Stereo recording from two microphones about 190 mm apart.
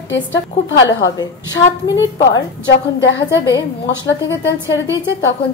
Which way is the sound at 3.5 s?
70° left (ahead or behind).